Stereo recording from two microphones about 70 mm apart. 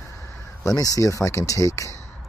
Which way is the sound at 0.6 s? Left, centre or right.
Left.